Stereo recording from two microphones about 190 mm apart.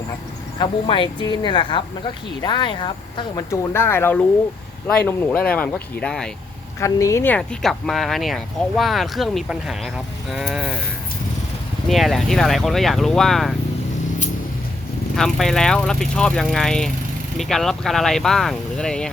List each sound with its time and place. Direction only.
0.6 s speech: 25° left (ahead or behind); by 6.3 s 5° left (ahead or behind)
6.7 s speech: 15° left (ahead or behind); by 10.8 s 5° right (ahead or behind)
11.9 s speech: centre (ahead or behind)
15.1 s speech: centre (ahead or behind)